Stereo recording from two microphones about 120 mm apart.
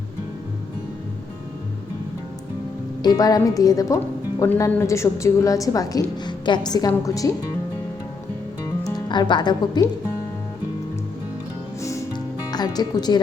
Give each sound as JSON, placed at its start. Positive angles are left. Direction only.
{"t": 3.0, "sound": "a woman's voice", "side_deg": 35}
{"t": 8.6, "sound": "music", "side_deg": 35}
{"t": 12.1, "sound": "music", "side_deg": 35}